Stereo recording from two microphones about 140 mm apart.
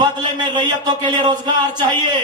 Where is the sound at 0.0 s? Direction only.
30° right (ahead or behind).